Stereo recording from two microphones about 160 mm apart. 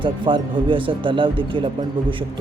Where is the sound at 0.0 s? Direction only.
30° right (ahead or behind).